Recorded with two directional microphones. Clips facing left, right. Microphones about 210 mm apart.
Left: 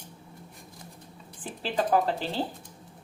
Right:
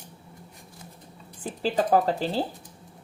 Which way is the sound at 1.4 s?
40° right (ahead or behind).